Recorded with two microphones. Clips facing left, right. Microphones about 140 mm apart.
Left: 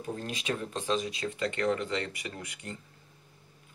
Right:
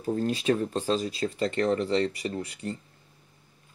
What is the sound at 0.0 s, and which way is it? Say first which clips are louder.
Speech: right 9 dB; 35° right (ahead or behind).